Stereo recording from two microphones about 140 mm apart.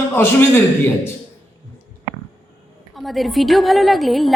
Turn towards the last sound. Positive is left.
turn(degrees=0)  # may be behind; listen again after turning